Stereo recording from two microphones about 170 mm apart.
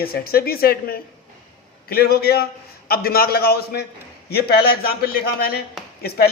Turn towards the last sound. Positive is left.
turn(degrees=65)  # may be behind; listen again after turning